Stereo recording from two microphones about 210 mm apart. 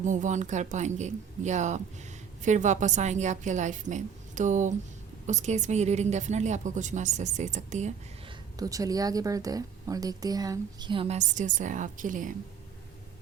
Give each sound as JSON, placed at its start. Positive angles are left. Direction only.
{"t": 0.0, "sound": "a woman's voice", "side_deg": -35}
{"t": 8.5, "sound": "a woman's voice", "side_deg": -15}